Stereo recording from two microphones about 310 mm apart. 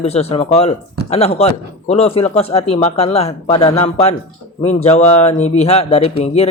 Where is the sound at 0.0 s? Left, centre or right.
Centre.